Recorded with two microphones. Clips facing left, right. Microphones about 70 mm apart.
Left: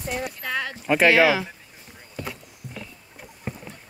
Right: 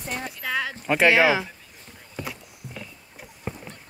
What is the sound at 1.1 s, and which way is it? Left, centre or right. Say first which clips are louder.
Speech: left 1 dB; right.